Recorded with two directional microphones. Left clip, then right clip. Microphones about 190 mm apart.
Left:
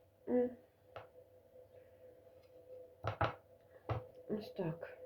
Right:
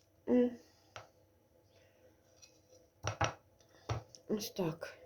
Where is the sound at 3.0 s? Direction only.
20° right (ahead or behind).